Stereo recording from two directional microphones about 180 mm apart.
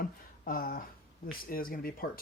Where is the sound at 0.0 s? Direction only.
50° left (ahead or behind).